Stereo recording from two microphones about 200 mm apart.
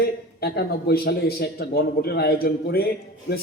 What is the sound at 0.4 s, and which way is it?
A man's voice, 50° left (ahead or behind).